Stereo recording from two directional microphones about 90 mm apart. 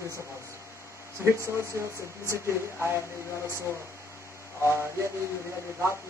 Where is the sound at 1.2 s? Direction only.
30° right (ahead or behind).